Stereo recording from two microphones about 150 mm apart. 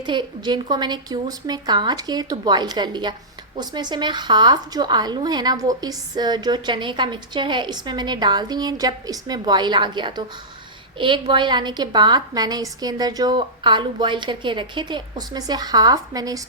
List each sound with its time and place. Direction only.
0.0 s a woman's voice: 30° right (ahead or behind)